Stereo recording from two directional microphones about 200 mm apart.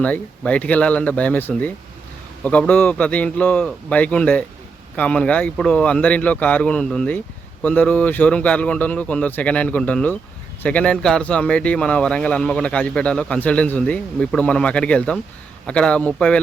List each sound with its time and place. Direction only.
0.0 s a man's voice: 5° left (ahead or behind)